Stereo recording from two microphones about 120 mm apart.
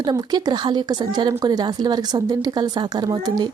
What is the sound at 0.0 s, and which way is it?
Speech, 35° right (ahead or behind).